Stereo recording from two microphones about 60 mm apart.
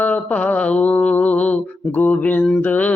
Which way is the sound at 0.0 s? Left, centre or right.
Left.